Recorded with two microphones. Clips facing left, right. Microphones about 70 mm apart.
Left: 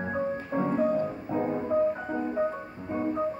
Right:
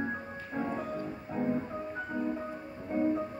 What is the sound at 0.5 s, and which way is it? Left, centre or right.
Music, left.